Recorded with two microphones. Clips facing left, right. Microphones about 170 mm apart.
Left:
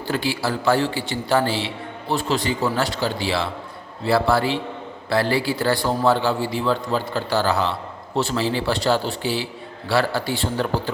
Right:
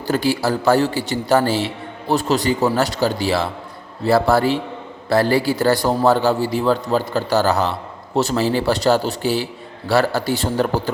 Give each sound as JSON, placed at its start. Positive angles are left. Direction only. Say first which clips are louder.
{"t": 0.1, "sound": "a man's voice", "louder": "right 5 dB", "side_deg": -40}